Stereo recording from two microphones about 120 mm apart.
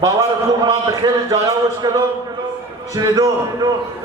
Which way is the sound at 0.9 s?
30° right (ahead or behind).